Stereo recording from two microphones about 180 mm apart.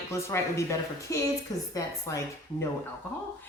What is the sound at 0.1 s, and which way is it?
A man's voice, 15° left (ahead or behind).